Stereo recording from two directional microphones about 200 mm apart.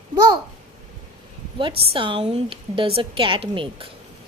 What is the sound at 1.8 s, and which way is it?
A woman's voice, 25° right (ahead or behind).